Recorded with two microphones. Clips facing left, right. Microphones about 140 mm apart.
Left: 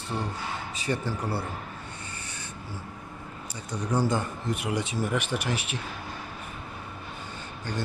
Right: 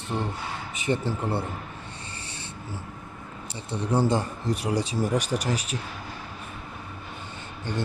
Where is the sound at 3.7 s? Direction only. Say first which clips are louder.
Right 3 dB; 30° right (ahead or behind).